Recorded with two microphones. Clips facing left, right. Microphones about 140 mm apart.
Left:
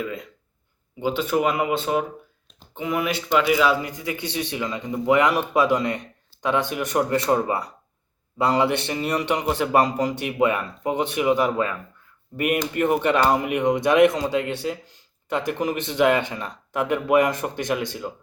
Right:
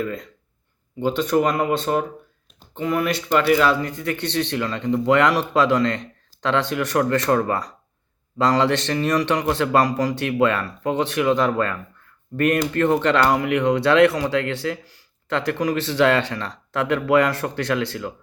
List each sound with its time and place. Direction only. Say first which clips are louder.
0.0 s speech: right 3 dB; 5° left (ahead or behind)